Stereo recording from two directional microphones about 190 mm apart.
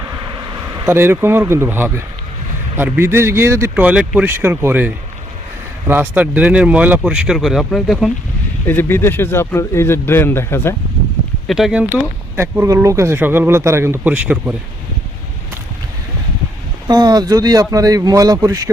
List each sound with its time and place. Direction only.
0.9 s speech: 10° right (ahead or behind)
5.9 s speech: 10° right (ahead or behind)
8.6 s speech: 10° left (ahead or behind)
11.4 s speech: centre (ahead or behind)
16.9 s speech: 20° right (ahead or behind)